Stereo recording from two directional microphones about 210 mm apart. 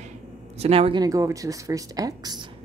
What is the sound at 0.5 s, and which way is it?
Speech, 30° right (ahead or behind).